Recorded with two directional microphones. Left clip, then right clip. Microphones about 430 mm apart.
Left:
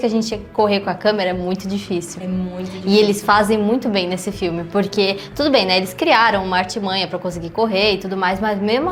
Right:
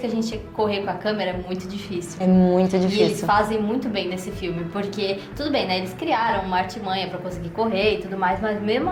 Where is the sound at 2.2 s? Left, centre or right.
Right.